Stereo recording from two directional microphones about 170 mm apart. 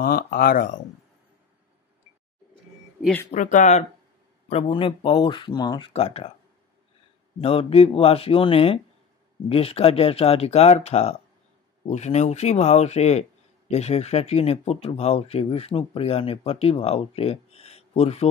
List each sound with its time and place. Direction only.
0.0 s speech: 60° left (ahead or behind)
3.3 s speech: 50° left (ahead or behind)
4.5 s speech: 35° left (ahead or behind)
7.3 s speech: 35° left (ahead or behind)